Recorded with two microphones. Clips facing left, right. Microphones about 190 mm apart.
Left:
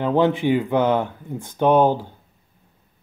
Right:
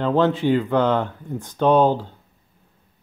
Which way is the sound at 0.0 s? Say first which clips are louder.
Even; 15° left (ahead or behind).